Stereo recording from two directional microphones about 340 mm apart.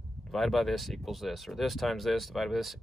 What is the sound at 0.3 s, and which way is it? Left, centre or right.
Speech, centre.